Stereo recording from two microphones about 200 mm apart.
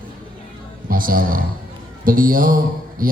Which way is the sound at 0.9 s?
45° right (ahead or behind).